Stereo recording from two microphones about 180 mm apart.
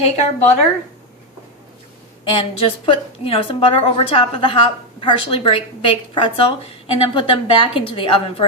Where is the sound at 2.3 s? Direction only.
30° left (ahead or behind).